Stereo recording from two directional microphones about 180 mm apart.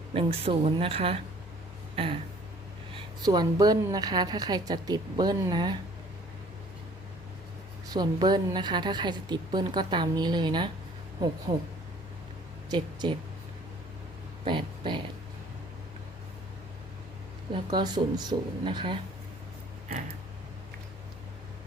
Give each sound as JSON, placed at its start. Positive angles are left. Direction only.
{"t": 0.1, "sound": "speech", "side_deg": -30}
{"t": 3.2, "sound": "a woman's voice", "side_deg": -20}
{"t": 7.9, "sound": "a woman's voice", "side_deg": -20}
{"t": 12.7, "sound": "a woman's voice", "side_deg": -25}
{"t": 14.4, "sound": "speech", "side_deg": -25}
{"t": 17.5, "sound": "a woman's voice", "side_deg": -25}